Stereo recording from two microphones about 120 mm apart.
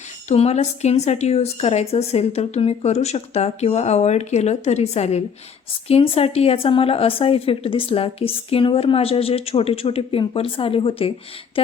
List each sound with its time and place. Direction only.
0.3 s a woman's voice: 65° left (ahead or behind)
5.9 s speech: 55° left (ahead or behind)